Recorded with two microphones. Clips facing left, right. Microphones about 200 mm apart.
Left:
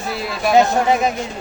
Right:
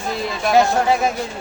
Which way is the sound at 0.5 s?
20° left (ahead or behind).